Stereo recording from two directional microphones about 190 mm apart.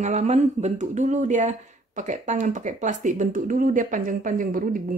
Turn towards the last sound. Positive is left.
turn(degrees=-45)  # may be behind; listen again after turning